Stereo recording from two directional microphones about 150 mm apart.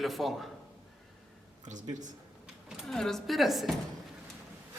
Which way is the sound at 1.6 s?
55° right (ahead or behind).